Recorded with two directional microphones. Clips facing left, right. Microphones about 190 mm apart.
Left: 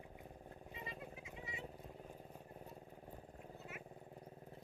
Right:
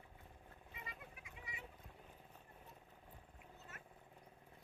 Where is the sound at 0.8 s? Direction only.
25° left (ahead or behind).